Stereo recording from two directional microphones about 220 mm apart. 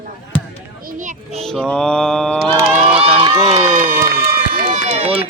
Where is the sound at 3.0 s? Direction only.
25° right (ahead or behind).